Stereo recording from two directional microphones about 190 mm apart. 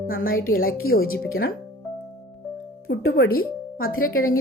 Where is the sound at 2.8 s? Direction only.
55° left (ahead or behind).